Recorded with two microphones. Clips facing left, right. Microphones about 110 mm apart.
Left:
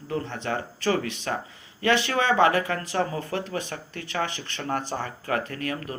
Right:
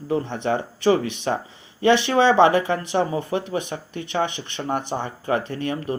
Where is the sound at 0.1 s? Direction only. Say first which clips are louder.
Right 6 dB; 20° right (ahead or behind).